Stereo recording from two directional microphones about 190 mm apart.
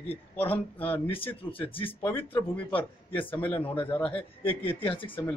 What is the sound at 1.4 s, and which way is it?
Speech, 30° left (ahead or behind).